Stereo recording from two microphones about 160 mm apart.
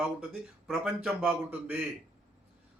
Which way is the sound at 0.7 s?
Centre (ahead or behind).